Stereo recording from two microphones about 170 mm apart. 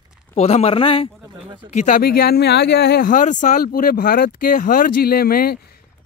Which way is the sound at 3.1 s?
50° left (ahead or behind).